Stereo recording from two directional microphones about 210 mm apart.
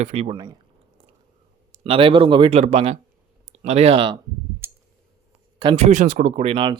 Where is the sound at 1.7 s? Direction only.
25° right (ahead or behind).